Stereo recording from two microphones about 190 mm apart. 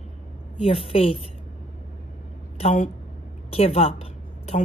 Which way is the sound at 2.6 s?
40° left (ahead or behind).